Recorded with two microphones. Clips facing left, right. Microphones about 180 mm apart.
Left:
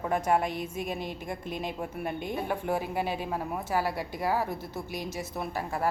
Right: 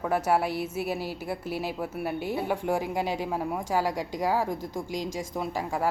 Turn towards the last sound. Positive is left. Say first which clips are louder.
# right 2 dB
turn(degrees=-15)  # may be behind; listen again after turning